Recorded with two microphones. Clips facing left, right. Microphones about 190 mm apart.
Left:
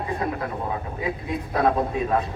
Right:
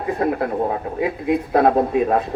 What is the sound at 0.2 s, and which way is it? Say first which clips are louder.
Speech: right 7 dB; 50° right (ahead or behind).